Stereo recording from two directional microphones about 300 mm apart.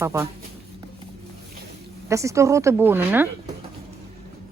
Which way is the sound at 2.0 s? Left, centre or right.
Centre.